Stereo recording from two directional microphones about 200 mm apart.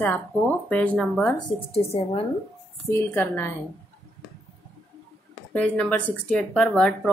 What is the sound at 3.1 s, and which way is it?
Speech, 10° left (ahead or behind).